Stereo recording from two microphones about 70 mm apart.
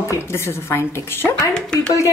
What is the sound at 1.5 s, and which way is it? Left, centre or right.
Speech, centre.